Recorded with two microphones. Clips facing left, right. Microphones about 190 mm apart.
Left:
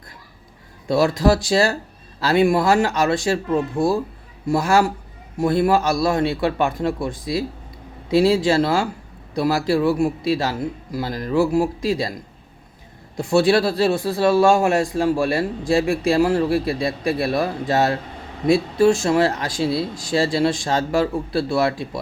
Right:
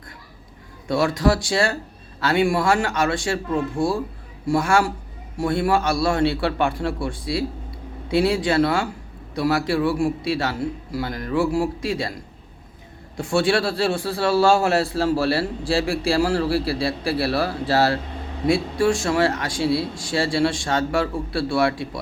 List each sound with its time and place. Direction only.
0.9 s speech: 25° left (ahead or behind)
13.5 s a man's voice: 20° left (ahead or behind)